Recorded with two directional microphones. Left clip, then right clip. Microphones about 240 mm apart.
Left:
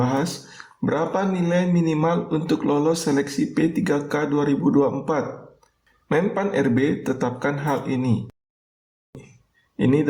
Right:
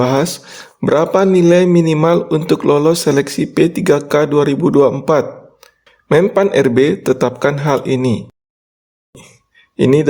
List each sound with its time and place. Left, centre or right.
0.0 s speech: right
9.7 s speech: right